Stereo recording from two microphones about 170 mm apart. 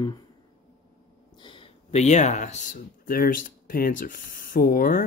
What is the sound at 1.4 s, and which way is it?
Speech, 30° left (ahead or behind).